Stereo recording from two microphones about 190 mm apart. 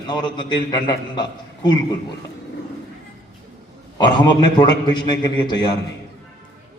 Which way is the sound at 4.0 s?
25° left (ahead or behind).